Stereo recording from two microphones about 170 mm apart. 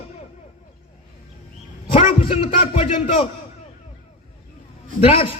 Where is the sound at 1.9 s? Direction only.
30° left (ahead or behind).